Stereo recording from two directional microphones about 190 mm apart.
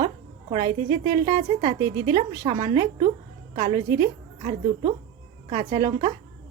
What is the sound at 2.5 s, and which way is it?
Speech, 20° right (ahead or behind).